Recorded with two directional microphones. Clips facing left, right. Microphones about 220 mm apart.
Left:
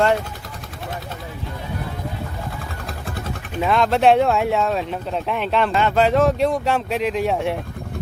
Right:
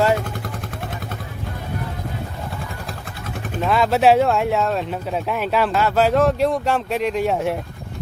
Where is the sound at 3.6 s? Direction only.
5° right (ahead or behind).